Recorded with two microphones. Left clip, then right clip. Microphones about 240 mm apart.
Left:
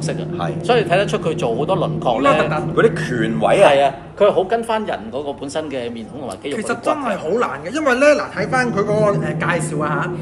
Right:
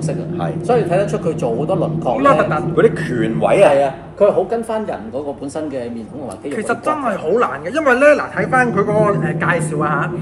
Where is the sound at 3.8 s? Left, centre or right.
Centre.